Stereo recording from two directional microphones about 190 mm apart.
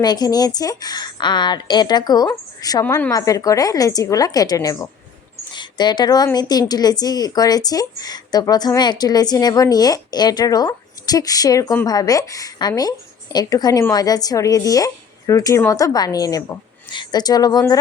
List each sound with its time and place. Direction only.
0.0 s a woman's voice: 20° left (ahead or behind)